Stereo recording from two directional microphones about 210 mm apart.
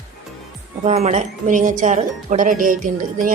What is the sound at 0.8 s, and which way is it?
Speech, 30° right (ahead or behind).